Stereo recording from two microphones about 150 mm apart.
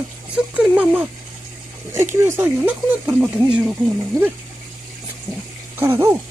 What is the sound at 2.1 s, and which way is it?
Speech, 20° right (ahead or behind).